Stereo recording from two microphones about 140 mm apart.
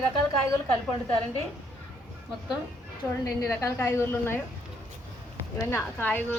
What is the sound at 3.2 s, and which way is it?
A woman's voice, 20° left (ahead or behind).